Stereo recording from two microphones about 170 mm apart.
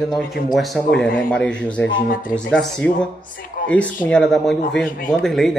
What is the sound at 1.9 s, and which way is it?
Speech, 55° left (ahead or behind).